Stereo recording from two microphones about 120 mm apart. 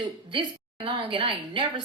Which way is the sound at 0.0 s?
40° right (ahead or behind).